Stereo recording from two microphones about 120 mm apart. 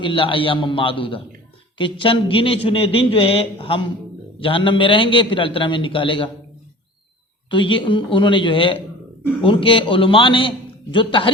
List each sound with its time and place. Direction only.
0.0 s a man's voice: 45° left (ahead or behind)
7.5 s a man's voice: 45° left (ahead or behind)